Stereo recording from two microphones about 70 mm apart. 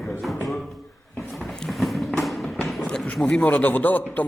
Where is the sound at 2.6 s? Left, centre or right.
Centre.